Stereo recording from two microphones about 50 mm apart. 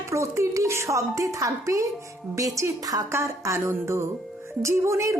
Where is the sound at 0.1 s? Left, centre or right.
Right.